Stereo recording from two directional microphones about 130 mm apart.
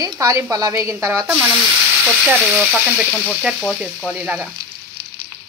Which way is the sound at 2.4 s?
5° right (ahead or behind).